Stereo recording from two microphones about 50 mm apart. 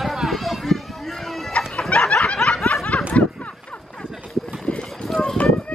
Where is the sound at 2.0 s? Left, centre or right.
Centre.